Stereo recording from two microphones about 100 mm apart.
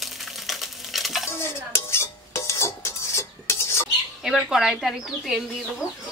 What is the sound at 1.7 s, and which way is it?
Cutlery, 25° left (ahead or behind).